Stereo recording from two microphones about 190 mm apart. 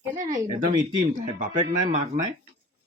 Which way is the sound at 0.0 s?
10° right (ahead or behind).